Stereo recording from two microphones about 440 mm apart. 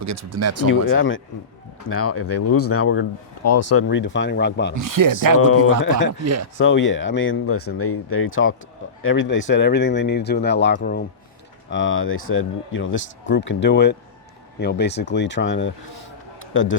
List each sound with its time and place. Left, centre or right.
0.0 s speech: right
0.7 s speech: left
4.7 s speech: right
5.8 s speech: left
6.2 s speech: right
6.6 s speech: left
16.4 s a sound: left